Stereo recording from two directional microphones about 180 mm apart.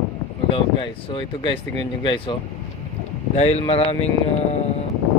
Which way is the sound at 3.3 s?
35° left (ahead or behind).